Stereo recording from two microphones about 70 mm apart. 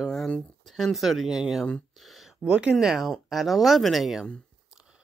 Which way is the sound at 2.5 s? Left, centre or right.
Centre.